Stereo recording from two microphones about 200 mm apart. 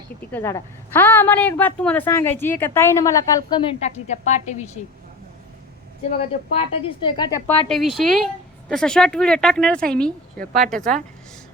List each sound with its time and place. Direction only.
0.2 s a woman's voice: 10° left (ahead or behind)
3.8 s a woman's voice: 35° left (ahead or behind)
6.1 s a woman's voice: 30° left (ahead or behind)
7.7 s speech: centre (ahead or behind)